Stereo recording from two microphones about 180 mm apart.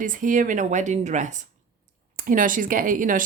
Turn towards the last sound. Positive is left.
turn(degrees=-45)  # may be behind; listen again after turning